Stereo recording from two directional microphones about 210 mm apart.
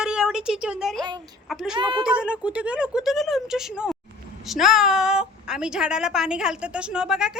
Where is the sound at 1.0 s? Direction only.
20° right (ahead or behind).